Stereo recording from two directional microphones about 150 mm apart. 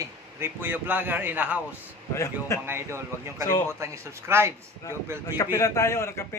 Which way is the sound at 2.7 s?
15° right (ahead or behind).